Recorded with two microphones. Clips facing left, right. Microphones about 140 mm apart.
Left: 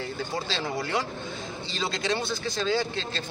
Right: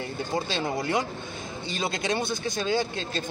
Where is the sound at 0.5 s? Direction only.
15° right (ahead or behind).